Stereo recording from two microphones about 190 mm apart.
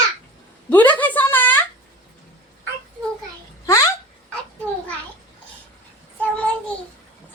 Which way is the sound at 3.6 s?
15° left (ahead or behind).